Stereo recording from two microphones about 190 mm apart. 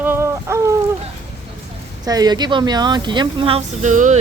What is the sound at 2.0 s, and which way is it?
Speech, 20° right (ahead or behind).